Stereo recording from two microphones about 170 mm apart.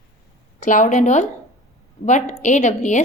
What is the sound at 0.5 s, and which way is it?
A woman's voice, 50° left (ahead or behind).